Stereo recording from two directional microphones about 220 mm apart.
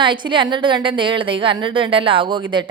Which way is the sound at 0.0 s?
20° right (ahead or behind).